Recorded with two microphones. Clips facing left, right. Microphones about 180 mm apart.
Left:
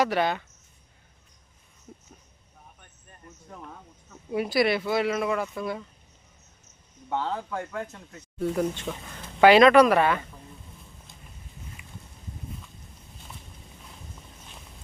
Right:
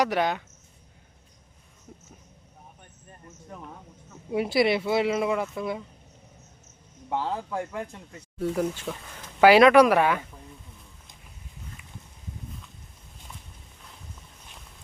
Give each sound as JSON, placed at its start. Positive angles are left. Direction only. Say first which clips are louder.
{"t": 0.0, "sound": "speech", "louder": "even", "side_deg": -15}
{"t": 4.3, "sound": "speech", "louder": "right 1 dB", "side_deg": -25}
{"t": 7.1, "sound": "speech", "louder": "right 1 dB", "side_deg": -5}